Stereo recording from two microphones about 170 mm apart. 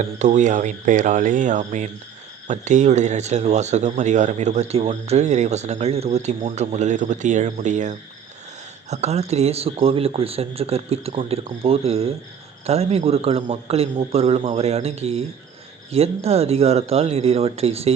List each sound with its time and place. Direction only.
0.0 s speech: 45° right (ahead or behind)